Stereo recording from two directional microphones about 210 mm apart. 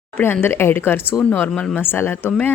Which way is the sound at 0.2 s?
10° left (ahead or behind).